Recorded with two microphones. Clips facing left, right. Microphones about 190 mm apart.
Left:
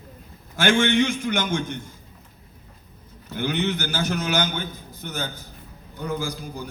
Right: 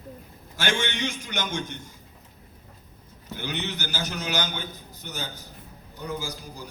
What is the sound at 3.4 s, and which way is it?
A man's voice, 55° left (ahead or behind).